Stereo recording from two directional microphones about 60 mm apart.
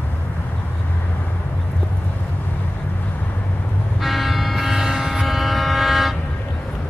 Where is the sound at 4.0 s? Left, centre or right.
Centre.